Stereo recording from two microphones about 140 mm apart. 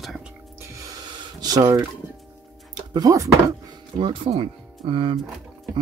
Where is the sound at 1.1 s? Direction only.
30° right (ahead or behind).